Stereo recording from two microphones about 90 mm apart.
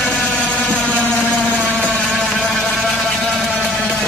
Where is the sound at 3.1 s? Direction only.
Centre (ahead or behind).